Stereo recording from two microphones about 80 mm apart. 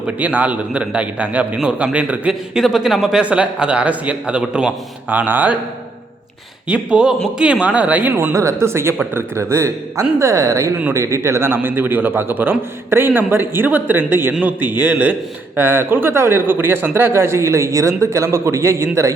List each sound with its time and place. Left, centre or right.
0.2 s a man's voice: centre
6.7 s a man's voice: centre; by 19.1 s right